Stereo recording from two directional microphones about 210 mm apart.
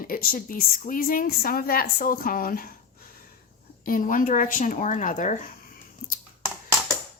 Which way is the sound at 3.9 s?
40° left (ahead or behind).